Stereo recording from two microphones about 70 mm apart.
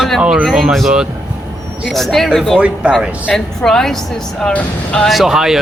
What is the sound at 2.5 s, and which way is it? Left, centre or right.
Speech, centre.